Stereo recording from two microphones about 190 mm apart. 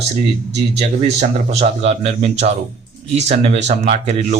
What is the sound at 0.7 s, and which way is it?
A man's voice, 35° right (ahead or behind).